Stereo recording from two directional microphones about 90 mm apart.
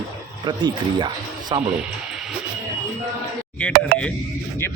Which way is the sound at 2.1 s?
5° right (ahead or behind).